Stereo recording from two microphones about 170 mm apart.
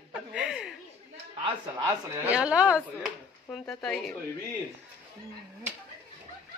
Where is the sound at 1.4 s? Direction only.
20° right (ahead or behind).